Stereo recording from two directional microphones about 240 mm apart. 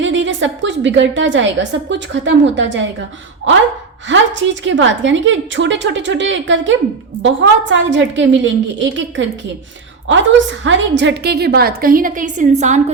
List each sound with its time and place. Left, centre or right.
0.0 s a woman's voice: right
4.1 s a woman's voice: right